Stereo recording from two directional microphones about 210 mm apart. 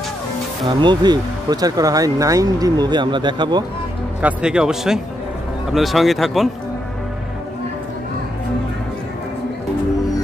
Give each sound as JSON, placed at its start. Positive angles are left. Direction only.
{"t": 0.7, "sound": "speech", "side_deg": -20}
{"t": 4.2, "sound": "speech", "side_deg": -5}